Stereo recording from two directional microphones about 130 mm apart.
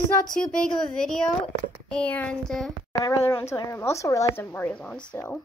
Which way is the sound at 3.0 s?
25° left (ahead or behind).